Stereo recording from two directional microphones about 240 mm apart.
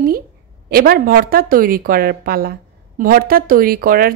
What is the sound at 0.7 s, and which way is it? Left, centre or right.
Speech, right.